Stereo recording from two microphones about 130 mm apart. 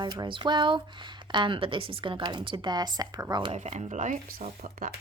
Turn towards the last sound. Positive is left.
turn(degrees=-75)  # may be behind; listen again after turning